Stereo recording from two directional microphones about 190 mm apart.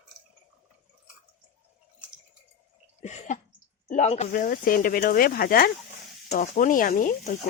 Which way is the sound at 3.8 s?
35° left (ahead or behind).